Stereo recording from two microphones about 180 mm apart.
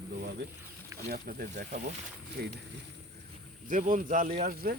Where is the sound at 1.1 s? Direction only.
55° right (ahead or behind).